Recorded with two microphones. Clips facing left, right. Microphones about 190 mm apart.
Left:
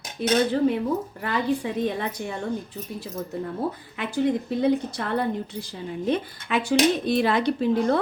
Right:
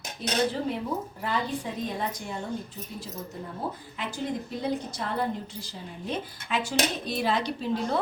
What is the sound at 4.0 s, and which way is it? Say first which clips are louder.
A woman's voice: left 9 dB; 60° left (ahead or behind).